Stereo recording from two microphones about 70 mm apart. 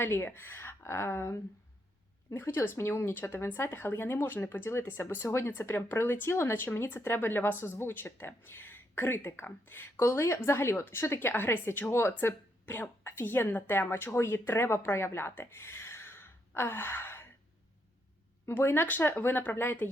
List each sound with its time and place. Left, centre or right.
0.0 s speech: left
18.4 s speech: left